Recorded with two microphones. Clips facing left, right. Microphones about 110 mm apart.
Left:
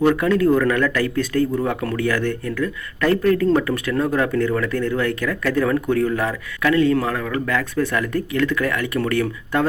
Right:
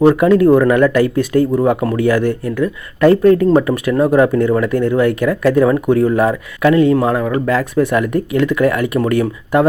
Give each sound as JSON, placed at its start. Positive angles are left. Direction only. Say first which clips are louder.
{"t": 0.0, "sound": "speech", "louder": "right 7 dB", "side_deg": -25}